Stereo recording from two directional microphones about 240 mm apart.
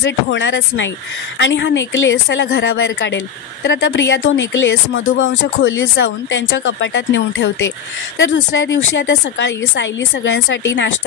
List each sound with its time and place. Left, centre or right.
0.0 s speech: left